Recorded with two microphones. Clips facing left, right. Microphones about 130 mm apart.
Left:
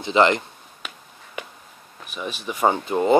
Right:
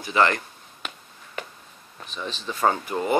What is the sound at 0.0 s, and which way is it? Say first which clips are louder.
Speech: left 4 dB; 20° left (ahead or behind).